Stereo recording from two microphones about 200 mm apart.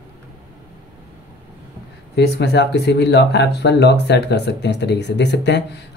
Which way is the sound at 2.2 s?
55° left (ahead or behind).